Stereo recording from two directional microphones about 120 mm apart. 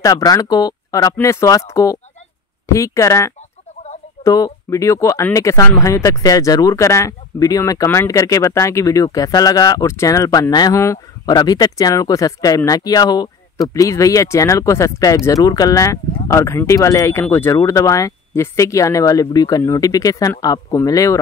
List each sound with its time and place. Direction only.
0.0 s speech: 30° left (ahead or behind)